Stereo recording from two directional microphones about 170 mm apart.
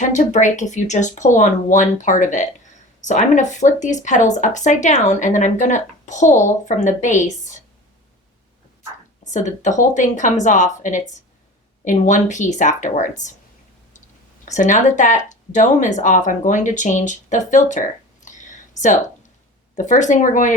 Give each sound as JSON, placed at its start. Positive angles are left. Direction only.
{"t": 0.0, "sound": "speech", "side_deg": 45}
{"t": 9.3, "sound": "speech", "side_deg": 45}
{"t": 14.4, "sound": "speech", "side_deg": 45}
{"t": 18.3, "sound": "a sound", "side_deg": 45}
{"t": 19.7, "sound": "speech", "side_deg": 45}